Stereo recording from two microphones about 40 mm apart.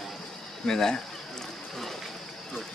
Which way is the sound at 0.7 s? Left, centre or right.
Centre.